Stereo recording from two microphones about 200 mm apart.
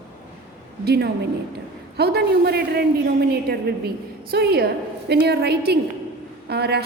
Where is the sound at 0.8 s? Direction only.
55° right (ahead or behind).